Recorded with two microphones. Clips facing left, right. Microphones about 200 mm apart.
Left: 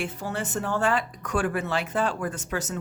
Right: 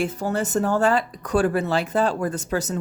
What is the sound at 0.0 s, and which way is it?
Speech, 40° right (ahead or behind).